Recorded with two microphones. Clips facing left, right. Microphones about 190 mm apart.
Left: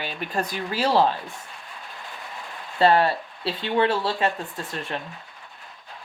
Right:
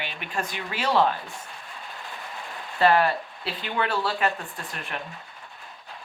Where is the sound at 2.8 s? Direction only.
30° left (ahead or behind).